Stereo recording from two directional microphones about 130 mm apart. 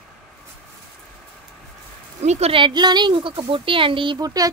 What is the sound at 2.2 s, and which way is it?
Speech, 55° right (ahead or behind).